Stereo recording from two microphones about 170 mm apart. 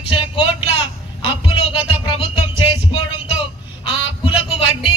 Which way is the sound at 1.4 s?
30° left (ahead or behind).